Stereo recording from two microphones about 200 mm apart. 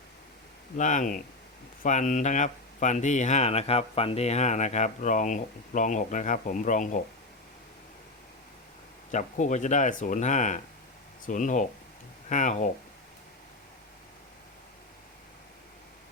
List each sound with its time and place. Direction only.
0.8 s speech: 40° left (ahead or behind)
9.1 s speech: 40° left (ahead or behind)